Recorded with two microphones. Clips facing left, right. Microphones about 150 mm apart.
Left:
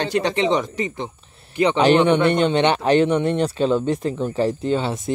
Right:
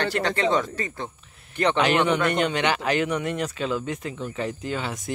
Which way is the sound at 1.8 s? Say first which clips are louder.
Left 7 dB; 30° left (ahead or behind).